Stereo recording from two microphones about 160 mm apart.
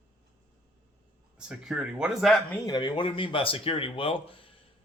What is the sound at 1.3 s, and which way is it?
Speech, 5° right (ahead or behind).